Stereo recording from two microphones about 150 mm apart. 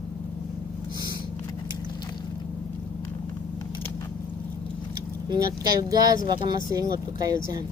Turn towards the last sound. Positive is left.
turn(degrees=-25)  # may be behind; listen again after turning